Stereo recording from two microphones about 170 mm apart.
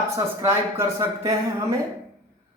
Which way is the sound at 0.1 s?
15° right (ahead or behind).